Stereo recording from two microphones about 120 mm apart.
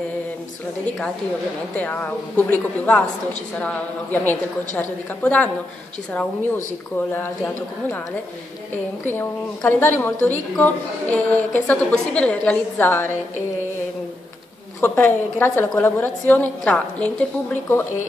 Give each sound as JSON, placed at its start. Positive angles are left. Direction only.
{"t": 1.8, "sound": "a woman's voice", "side_deg": 15}
{"t": 7.1, "sound": "a woman's voice", "side_deg": 15}
{"t": 9.0, "sound": "a woman's voice", "side_deg": 20}
{"t": 14.8, "sound": "a woman's voice", "side_deg": 20}